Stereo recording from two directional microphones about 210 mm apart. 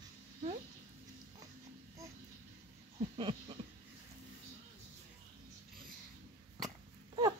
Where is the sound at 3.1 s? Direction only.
25° right (ahead or behind).